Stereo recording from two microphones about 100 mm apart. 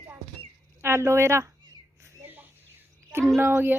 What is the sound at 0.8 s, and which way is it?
Speech, 25° right (ahead or behind).